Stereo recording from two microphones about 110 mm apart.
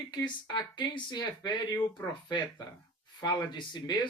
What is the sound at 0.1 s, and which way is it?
Speech, 40° left (ahead or behind).